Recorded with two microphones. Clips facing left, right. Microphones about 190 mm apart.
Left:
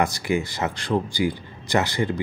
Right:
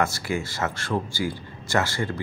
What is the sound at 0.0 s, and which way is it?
Speech, 15° left (ahead or behind).